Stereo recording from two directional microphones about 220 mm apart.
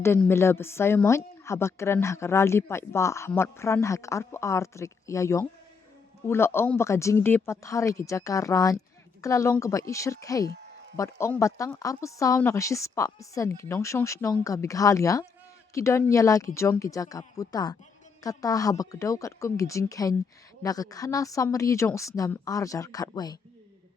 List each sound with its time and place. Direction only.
0.0 s speech: 10° left (ahead or behind)